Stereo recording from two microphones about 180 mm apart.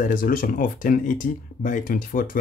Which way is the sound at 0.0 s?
50° left (ahead or behind).